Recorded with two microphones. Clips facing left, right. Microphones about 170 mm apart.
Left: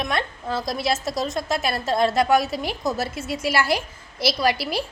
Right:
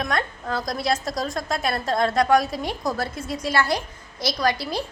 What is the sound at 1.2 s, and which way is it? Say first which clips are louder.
Speech: left 2 dB; 25° left (ahead or behind).